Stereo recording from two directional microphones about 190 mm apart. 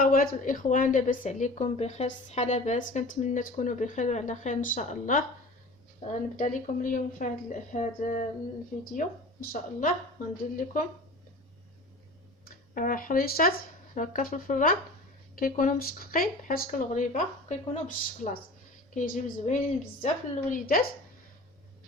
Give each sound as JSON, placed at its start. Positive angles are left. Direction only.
{"t": 0.0, "sound": "a woman's voice", "side_deg": 45}
{"t": 12.5, "sound": "a woman's voice", "side_deg": 45}